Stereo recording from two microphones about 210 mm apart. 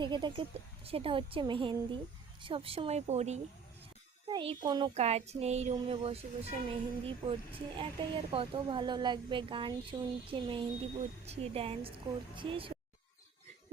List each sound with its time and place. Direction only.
0.0 s speech: 20° right (ahead or behind)
4.3 s speech: 20° right (ahead or behind)
4.9 s speech: 30° right (ahead or behind)